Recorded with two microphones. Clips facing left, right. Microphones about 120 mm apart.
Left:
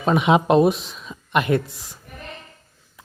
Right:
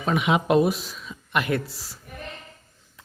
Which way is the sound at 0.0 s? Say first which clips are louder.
Left 5 dB; 30° left (ahead or behind).